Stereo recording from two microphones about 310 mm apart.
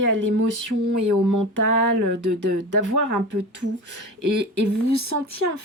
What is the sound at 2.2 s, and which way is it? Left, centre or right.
Speech, right.